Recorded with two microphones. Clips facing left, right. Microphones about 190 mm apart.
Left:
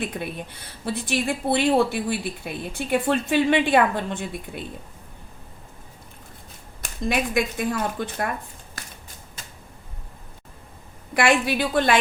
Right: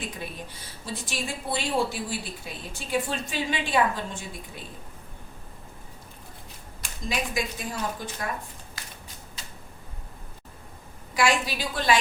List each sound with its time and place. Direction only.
0.0 s a woman's voice: 60° left (ahead or behind)
7.1 s a woman's voice: 55° left (ahead or behind)
11.1 s a woman's voice: 60° left (ahead or behind)